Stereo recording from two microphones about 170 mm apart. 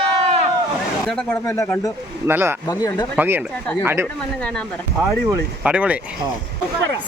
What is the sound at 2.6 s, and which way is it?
Speech, 20° left (ahead or behind).